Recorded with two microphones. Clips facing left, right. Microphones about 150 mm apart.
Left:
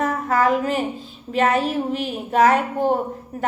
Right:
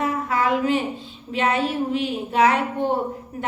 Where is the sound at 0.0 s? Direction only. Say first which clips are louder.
Left 3 dB; 40° left (ahead or behind).